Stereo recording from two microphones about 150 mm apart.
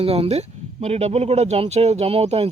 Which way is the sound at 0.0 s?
40° right (ahead or behind).